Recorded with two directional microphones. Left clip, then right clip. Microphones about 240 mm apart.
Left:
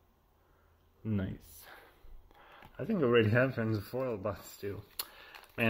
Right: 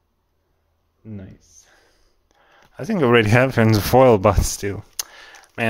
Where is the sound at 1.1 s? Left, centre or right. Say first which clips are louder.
Left 1 dB; centre.